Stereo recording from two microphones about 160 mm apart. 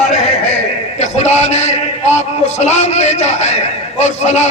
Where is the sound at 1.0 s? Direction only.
45° left (ahead or behind).